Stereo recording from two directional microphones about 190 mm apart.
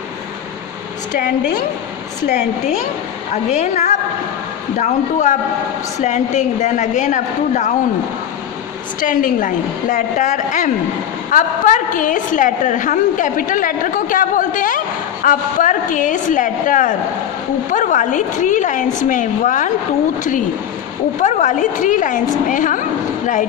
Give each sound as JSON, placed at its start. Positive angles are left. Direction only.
{"t": 2.2, "sound": "a woman's voice", "side_deg": 40}
{"t": 9.0, "sound": "a woman's voice", "side_deg": 45}
{"t": 21.2, "sound": "a woman's voice", "side_deg": 40}